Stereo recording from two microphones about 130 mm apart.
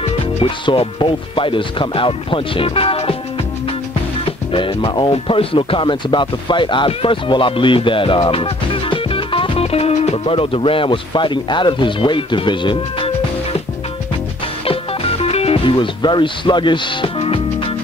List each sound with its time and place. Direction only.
0.0 s speech: 45° left (ahead or behind)
4.5 s speech: 40° left (ahead or behind)
14.7 s music: 50° left (ahead or behind)